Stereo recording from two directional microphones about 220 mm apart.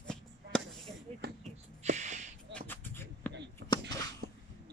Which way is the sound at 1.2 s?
45° right (ahead or behind).